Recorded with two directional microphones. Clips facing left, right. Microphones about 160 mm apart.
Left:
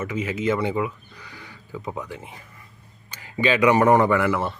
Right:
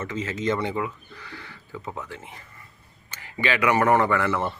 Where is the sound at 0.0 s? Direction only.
10° left (ahead or behind).